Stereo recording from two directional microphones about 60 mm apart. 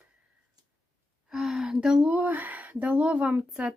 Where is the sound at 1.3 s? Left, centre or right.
Centre.